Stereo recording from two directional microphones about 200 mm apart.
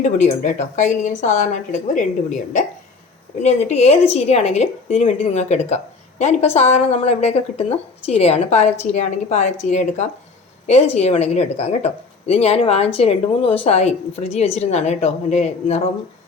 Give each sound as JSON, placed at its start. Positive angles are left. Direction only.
{"t": 0.0, "sound": "a woman's voice", "side_deg": 35}